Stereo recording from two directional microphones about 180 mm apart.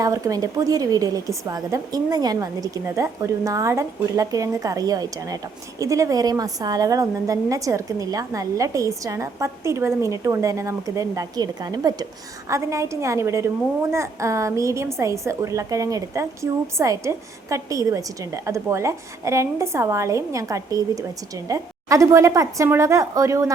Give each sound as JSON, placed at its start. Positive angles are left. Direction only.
{"t": 0.0, "sound": "a woman's voice", "side_deg": -20}